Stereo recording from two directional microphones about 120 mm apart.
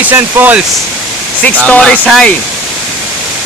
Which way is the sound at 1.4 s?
10° left (ahead or behind).